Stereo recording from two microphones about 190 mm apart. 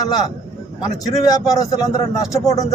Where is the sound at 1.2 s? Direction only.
20° left (ahead or behind).